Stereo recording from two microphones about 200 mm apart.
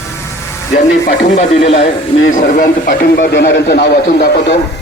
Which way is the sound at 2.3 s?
45° left (ahead or behind).